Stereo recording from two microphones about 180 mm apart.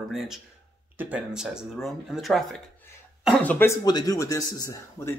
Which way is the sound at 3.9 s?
20° left (ahead or behind).